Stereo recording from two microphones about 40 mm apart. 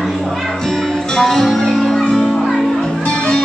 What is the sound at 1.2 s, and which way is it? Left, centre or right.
Music, centre.